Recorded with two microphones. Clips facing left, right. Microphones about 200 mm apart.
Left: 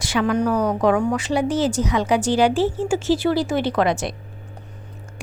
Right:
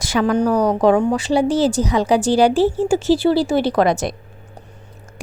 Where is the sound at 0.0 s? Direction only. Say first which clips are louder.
Right 3 dB; 40° right (ahead or behind).